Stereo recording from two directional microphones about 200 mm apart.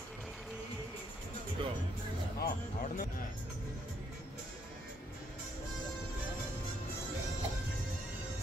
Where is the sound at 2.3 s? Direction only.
50° left (ahead or behind).